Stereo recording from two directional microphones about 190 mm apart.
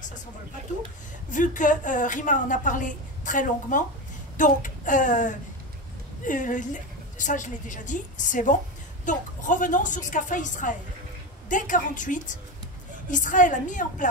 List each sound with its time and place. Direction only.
1.3 s a woman's voice: 40° left (ahead or behind)